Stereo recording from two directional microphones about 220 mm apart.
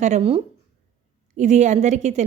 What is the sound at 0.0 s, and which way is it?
A woman's voice, 30° right (ahead or behind).